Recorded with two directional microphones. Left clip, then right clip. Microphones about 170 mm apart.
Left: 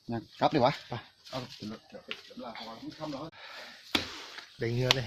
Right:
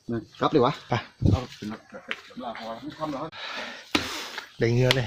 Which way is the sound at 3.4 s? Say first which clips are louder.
Right 11 dB; 55° right (ahead or behind).